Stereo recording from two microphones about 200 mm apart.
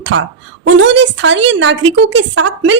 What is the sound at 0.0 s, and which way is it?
A woman's voice, 70° right (ahead or behind).